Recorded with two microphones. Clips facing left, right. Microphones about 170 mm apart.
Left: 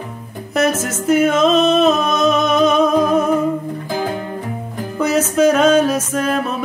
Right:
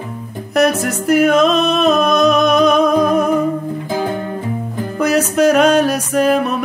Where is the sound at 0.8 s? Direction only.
65° right (ahead or behind).